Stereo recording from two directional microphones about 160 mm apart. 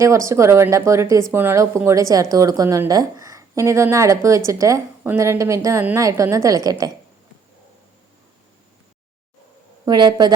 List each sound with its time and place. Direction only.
0.0 s speech: 20° right (ahead or behind)
9.8 s speech: 25° right (ahead or behind)